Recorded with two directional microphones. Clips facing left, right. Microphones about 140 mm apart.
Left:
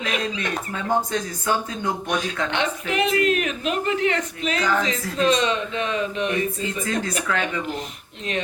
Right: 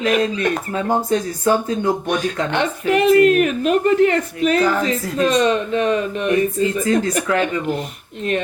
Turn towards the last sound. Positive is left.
turn(degrees=-45)  # may be behind; listen again after turning